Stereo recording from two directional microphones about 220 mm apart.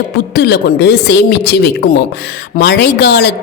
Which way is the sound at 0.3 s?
50° left (ahead or behind).